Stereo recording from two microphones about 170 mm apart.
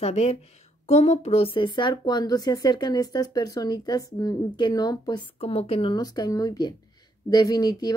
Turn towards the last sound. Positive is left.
turn(degrees=25)  # may be behind; listen again after turning